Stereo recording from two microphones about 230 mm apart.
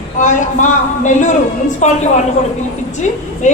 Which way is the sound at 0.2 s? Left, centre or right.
Left.